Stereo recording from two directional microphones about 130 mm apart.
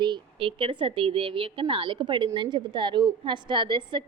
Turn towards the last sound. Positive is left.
turn(degrees=-40)  # may be behind; listen again after turning